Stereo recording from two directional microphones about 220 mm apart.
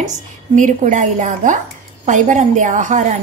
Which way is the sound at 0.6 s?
35° right (ahead or behind).